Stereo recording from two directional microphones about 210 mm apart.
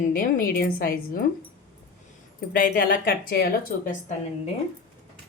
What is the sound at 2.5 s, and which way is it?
Speech, 40° left (ahead or behind).